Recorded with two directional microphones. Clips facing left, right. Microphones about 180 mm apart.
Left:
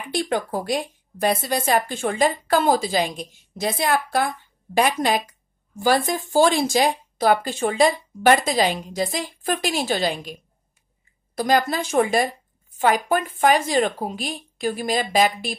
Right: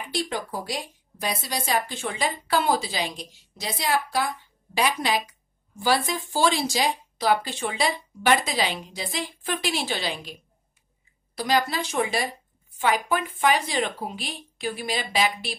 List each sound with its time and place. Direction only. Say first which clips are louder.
0.1 s speech: left 6 dB; 55° left (ahead or behind)
11.3 s speech: left 4 dB; 50° left (ahead or behind)